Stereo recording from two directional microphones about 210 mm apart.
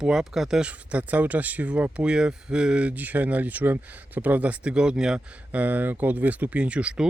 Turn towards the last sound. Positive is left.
turn(degrees=-5)  # may be behind; listen again after turning